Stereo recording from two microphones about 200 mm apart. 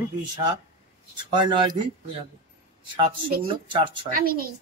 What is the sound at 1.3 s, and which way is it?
Speech, 20° right (ahead or behind).